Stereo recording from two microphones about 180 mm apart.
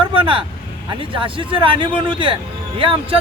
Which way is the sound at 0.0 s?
30° right (ahead or behind).